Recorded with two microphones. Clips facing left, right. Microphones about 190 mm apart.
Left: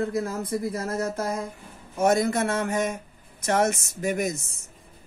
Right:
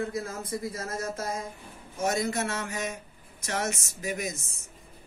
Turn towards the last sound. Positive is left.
turn(degrees=55)  # may be behind; listen again after turning